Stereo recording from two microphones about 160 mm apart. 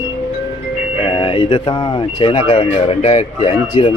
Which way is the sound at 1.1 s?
30° left (ahead or behind).